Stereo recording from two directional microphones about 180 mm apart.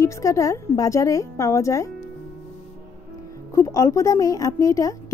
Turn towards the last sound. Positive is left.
turn(degrees=15)  # may be behind; listen again after turning